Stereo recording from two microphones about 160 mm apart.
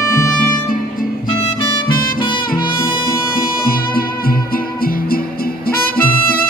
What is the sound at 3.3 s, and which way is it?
Music, 65° left (ahead or behind).